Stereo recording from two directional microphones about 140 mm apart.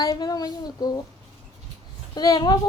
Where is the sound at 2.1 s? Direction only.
30° left (ahead or behind).